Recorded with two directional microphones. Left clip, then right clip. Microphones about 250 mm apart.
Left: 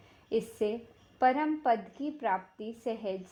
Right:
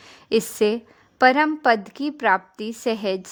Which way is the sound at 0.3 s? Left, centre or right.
Right.